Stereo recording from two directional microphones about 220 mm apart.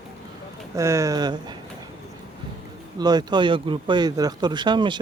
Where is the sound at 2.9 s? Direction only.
20° right (ahead or behind).